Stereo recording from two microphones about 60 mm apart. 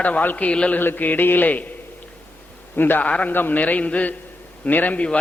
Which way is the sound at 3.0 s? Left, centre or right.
Left.